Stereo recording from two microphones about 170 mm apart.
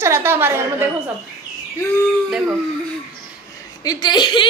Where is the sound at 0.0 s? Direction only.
15° right (ahead or behind).